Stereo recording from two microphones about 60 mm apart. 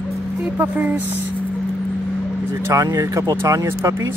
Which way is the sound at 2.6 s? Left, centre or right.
Right.